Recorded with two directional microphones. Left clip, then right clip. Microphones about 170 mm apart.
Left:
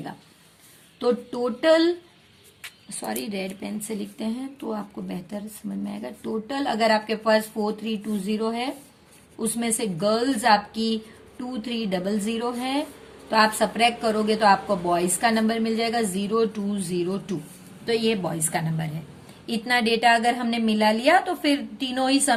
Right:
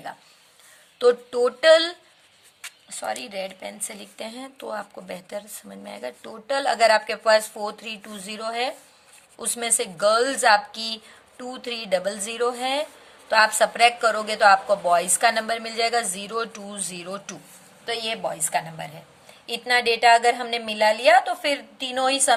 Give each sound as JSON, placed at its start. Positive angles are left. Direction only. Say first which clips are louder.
{"t": 0.9, "sound": "a woman's voice", "louder": "right 5 dB", "side_deg": -45}
{"t": 2.9, "sound": "a woman's voice", "louder": "right 1 dB", "side_deg": -40}
{"t": 17.8, "sound": "a woman's voice", "louder": "left 3 dB", "side_deg": -25}